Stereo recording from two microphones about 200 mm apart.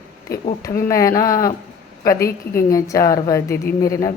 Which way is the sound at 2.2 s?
50° left (ahead or behind).